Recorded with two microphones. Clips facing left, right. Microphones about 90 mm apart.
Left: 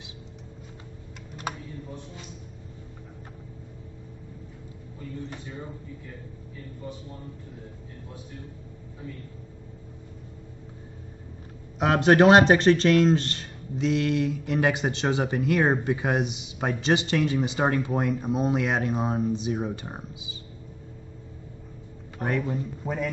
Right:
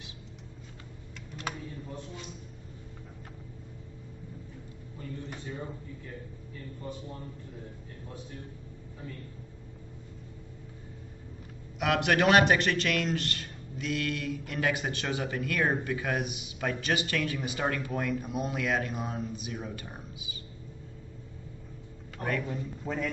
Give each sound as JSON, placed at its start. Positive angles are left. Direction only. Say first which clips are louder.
{"t": 11.8, "sound": "speech", "louder": "left 7 dB", "side_deg": 30}
{"t": 22.2, "sound": "speech", "louder": "left 5 dB", "side_deg": 20}